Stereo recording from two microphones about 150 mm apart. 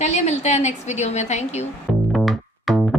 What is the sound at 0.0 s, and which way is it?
A woman's voice, 50° left (ahead or behind).